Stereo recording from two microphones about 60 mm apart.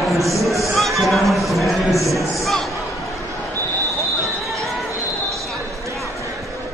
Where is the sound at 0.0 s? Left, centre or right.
Centre.